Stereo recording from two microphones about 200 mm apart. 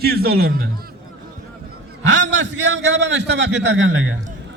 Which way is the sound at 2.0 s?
65° right (ahead or behind).